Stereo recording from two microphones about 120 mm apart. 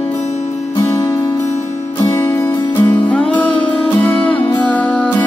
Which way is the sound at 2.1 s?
20° left (ahead or behind).